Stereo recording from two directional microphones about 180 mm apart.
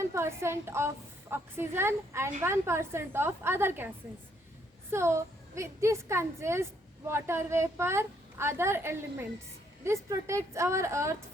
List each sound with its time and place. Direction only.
0.0 s a woman's voice: 15° right (ahead or behind)
4.9 s a woman's voice: 15° right (ahead or behind)